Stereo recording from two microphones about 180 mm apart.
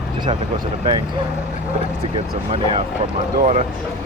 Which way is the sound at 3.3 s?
40° right (ahead or behind).